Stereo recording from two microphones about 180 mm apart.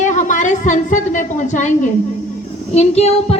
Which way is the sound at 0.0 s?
45° left (ahead or behind).